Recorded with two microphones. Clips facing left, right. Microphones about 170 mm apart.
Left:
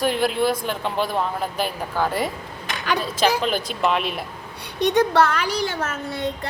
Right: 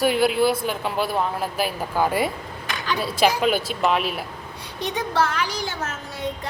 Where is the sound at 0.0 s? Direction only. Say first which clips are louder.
Right 2 dB; 5° right (ahead or behind).